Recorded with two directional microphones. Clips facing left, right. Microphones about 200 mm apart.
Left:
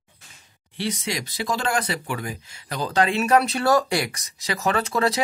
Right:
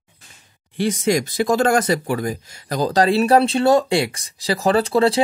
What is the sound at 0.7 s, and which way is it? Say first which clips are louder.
Speech: right 9 dB; 50° right (ahead or behind).